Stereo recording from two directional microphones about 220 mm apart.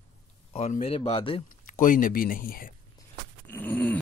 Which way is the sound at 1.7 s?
35° left (ahead or behind).